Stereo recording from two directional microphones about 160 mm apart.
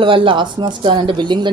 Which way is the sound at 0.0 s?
30° right (ahead or behind).